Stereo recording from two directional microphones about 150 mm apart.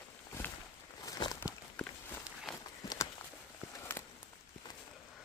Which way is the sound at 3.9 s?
15° left (ahead or behind).